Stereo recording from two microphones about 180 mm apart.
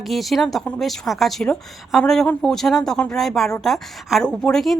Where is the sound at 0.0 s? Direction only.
Centre (ahead or behind).